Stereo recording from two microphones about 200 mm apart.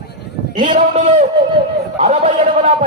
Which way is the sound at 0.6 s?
35° right (ahead or behind).